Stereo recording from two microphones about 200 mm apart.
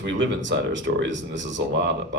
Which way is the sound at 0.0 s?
65° right (ahead or behind).